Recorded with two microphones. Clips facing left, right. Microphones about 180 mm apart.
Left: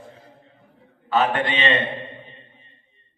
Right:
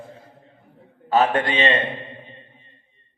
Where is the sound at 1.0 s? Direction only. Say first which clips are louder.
Right 2 dB; 40° right (ahead or behind).